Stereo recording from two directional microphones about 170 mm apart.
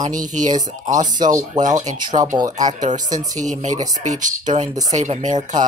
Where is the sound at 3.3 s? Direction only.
45° right (ahead or behind).